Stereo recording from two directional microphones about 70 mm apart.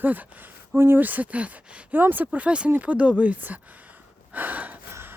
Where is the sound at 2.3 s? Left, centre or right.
Centre.